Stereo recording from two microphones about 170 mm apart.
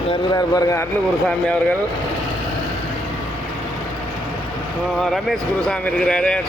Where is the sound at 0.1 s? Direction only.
20° left (ahead or behind).